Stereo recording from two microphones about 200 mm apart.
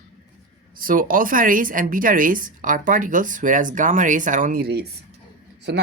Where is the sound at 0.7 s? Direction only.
45° right (ahead or behind).